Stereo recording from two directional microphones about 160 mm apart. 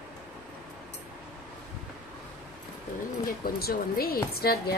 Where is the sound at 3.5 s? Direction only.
70° left (ahead or behind).